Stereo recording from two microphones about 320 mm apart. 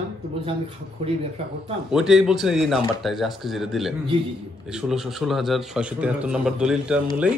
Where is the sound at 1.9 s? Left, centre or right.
Centre.